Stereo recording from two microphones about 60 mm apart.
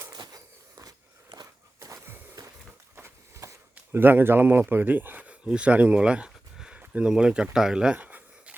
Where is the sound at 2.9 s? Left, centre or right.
Right.